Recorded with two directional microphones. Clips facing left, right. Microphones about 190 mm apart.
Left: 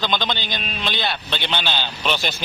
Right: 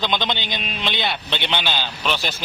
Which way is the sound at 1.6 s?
5° right (ahead or behind).